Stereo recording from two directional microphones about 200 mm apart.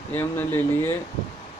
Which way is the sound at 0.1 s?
10° left (ahead or behind).